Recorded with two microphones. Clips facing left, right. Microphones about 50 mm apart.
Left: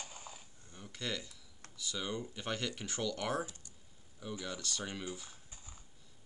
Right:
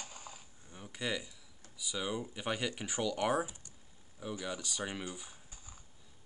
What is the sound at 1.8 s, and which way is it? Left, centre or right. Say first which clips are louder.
Speech: right 2 dB; centre.